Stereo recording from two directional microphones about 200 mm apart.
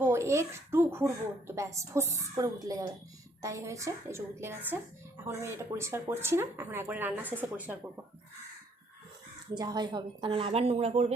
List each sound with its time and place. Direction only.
0.0 s a sound: 15° right (ahead or behind)
1.5 s a woman's voice: 15° right (ahead or behind)
9.6 s a woman's voice: 20° right (ahead or behind)